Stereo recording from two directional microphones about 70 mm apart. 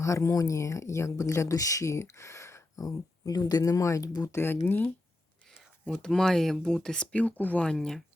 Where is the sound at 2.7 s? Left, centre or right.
Left.